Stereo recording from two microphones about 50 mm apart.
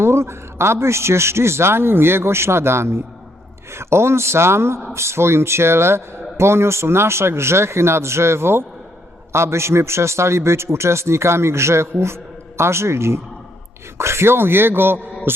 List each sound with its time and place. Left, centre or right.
0.0 s a man's voice: right